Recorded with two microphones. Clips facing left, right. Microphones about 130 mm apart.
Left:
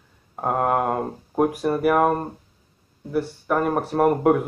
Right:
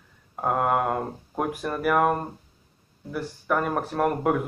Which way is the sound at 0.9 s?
15° left (ahead or behind).